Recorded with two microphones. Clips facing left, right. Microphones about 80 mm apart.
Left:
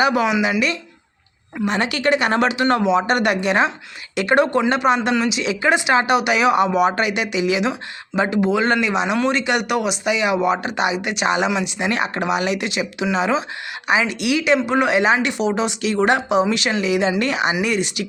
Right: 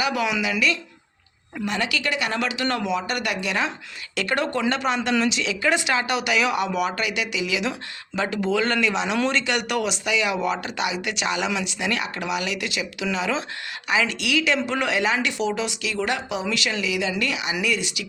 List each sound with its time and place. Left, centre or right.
0.0 s speech: left
1.6 s speech: left
3.1 s speech: left
4.1 s speech: left
5.4 s speech: left